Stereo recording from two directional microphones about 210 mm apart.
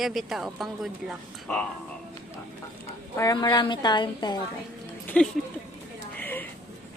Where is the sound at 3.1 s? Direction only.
20° left (ahead or behind).